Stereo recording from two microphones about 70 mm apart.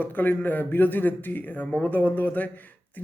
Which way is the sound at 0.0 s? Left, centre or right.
Left.